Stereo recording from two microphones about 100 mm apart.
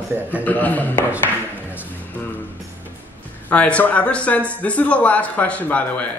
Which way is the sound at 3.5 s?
15° left (ahead or behind).